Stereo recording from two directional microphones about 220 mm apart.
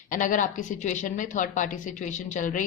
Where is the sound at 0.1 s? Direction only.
35° left (ahead or behind).